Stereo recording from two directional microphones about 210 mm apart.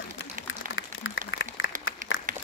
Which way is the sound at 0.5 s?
70° left (ahead or behind).